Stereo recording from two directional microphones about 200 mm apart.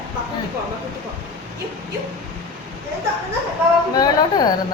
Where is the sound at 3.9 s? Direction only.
20° left (ahead or behind).